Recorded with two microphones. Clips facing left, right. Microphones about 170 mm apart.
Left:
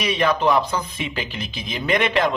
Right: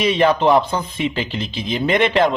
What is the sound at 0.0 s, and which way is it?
A man's voice, 30° right (ahead or behind).